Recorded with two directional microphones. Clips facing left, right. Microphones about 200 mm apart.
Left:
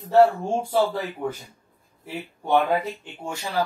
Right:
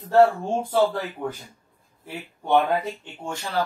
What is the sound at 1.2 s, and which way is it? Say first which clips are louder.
Speech: left 1 dB; 10° left (ahead or behind).